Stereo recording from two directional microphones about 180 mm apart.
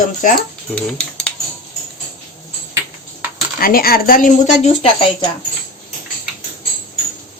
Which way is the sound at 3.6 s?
55° left (ahead or behind).